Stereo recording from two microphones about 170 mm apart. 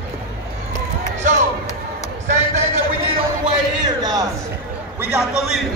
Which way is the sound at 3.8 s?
20° right (ahead or behind).